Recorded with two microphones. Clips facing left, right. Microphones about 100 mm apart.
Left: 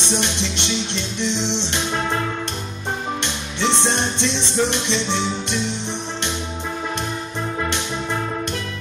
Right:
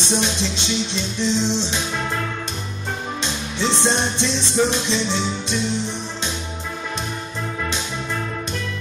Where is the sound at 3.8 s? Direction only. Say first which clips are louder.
Right 1 dB; 15° right (ahead or behind).